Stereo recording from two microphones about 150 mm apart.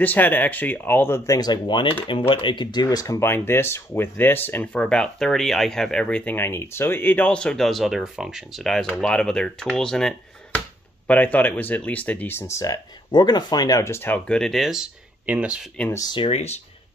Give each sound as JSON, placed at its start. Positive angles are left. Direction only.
{"t": 0.0, "sound": "speech", "side_deg": 10}
{"t": 15.9, "sound": "speech", "side_deg": 25}
{"t": 16.3, "sound": "speech", "side_deg": 45}